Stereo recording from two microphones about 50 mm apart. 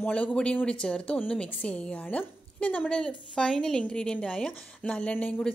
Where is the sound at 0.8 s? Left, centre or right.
Centre.